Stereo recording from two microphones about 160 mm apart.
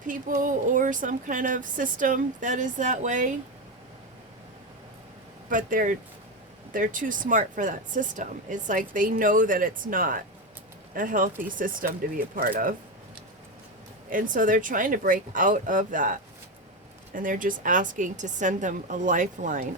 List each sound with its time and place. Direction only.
0.1 s speech: 55° right (ahead or behind)
5.5 s speech: 55° right (ahead or behind)
14.1 s speech: 55° right (ahead or behind)
17.2 s a woman's voice: 55° right (ahead or behind)